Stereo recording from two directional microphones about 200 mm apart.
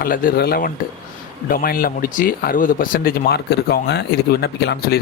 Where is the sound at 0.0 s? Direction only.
45° left (ahead or behind).